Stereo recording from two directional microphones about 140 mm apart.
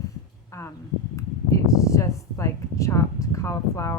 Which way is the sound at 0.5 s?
20° left (ahead or behind).